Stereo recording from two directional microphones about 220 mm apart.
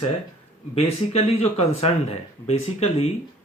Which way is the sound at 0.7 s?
30° left (ahead or behind).